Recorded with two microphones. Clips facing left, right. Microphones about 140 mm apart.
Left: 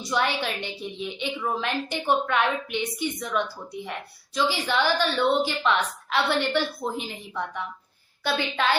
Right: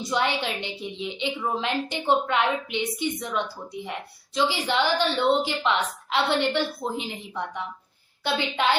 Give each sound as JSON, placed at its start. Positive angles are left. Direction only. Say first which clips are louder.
{"t": 0.0, "sound": "a woman's voice", "louder": "even", "side_deg": -20}